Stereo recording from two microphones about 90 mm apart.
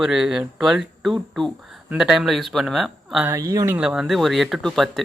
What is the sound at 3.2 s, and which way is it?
Speech, 35° right (ahead or behind).